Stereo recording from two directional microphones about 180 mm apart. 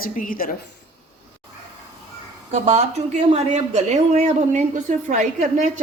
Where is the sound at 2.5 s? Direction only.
35° right (ahead or behind).